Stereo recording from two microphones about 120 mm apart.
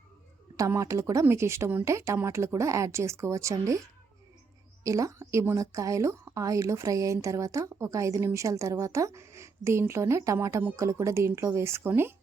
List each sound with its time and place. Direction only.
0.5 s a woman's voice: 25° right (ahead or behind)